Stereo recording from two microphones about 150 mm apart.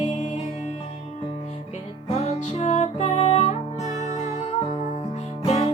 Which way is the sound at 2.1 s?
45° left (ahead or behind).